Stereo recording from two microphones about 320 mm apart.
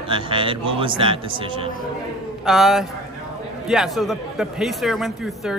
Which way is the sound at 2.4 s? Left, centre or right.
Centre.